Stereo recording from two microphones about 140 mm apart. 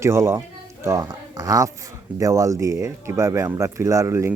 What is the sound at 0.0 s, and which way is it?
Speech, 20° right (ahead or behind).